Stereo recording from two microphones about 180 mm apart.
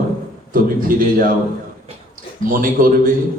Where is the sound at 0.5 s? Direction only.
50° right (ahead or behind).